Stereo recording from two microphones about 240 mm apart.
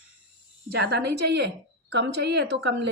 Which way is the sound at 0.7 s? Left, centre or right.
Right.